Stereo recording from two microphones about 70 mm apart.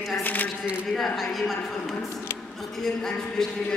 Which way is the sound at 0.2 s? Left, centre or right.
Left.